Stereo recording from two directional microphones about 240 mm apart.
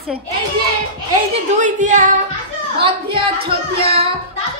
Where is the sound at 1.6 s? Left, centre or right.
Right.